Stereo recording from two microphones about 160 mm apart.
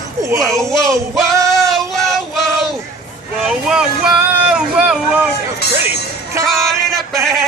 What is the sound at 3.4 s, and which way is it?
Speech, 5° right (ahead or behind).